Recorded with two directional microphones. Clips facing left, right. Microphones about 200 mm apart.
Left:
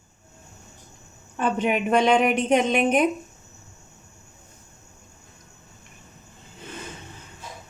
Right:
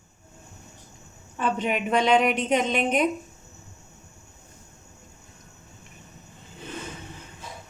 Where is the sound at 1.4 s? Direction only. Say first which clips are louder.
Left 3 dB; 50° left (ahead or behind).